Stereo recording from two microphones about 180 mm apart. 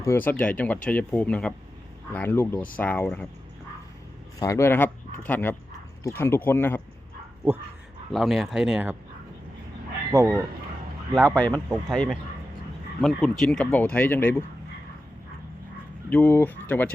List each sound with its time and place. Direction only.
0.0 s speech: 10° left (ahead or behind)
4.4 s speech: 15° left (ahead or behind)
8.1 s speech: centre (ahead or behind)
10.1 s speech: 15° right (ahead or behind)
11.1 s speech: 5° left (ahead or behind)
13.0 s speech: centre (ahead or behind)
16.0 s speech: 10° left (ahead or behind)